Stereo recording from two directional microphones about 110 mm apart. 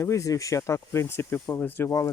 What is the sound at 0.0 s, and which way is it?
Speech, 30° left (ahead or behind).